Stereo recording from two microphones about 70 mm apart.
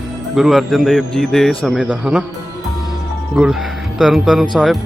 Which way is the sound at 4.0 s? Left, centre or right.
Centre.